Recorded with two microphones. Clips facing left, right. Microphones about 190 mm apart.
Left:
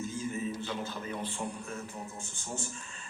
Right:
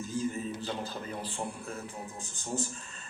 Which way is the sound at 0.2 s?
35° right (ahead or behind).